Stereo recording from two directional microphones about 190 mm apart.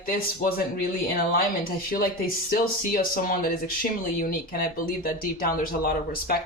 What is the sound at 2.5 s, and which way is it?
Speech, 50° left (ahead or behind).